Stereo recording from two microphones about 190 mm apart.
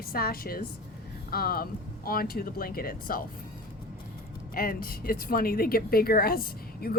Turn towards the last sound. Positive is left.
turn(degrees=50)  # may be behind; listen again after turning